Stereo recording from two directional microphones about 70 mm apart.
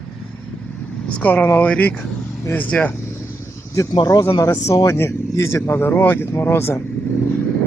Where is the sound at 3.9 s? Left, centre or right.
Left.